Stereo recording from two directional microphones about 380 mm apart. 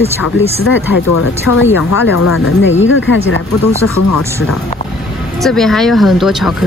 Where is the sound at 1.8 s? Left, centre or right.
Left.